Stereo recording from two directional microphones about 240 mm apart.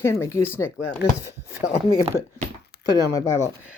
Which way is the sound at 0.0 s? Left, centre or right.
Centre.